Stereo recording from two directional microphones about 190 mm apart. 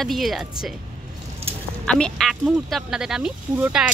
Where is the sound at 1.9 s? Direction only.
5° left (ahead or behind).